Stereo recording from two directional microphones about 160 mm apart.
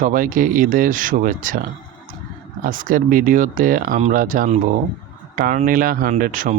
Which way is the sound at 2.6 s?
60° right (ahead or behind).